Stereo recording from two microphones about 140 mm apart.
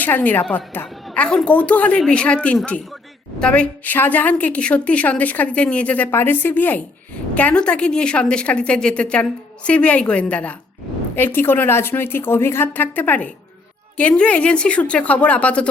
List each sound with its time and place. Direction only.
0.0 s a woman's voice: 10° left (ahead or behind)